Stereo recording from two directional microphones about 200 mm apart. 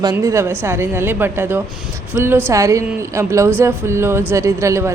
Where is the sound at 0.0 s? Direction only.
15° right (ahead or behind).